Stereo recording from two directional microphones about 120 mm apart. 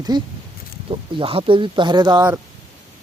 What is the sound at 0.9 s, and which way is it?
Speech, 50° right (ahead or behind).